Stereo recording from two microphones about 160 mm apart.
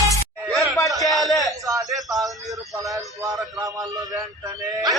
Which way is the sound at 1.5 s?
20° right (ahead or behind).